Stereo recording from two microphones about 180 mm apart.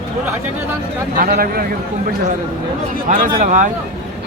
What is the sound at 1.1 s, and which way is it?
Speech, 55° right (ahead or behind).